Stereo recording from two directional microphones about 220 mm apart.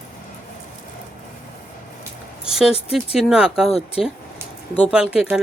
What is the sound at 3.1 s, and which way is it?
Speech, 5° right (ahead or behind).